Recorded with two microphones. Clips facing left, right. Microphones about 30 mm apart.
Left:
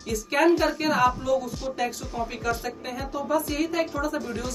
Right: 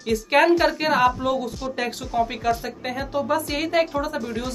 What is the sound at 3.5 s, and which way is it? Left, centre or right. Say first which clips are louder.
Speech: right 4 dB; right.